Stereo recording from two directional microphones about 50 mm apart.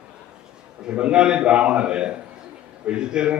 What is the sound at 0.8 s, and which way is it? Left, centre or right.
A man's voice, centre.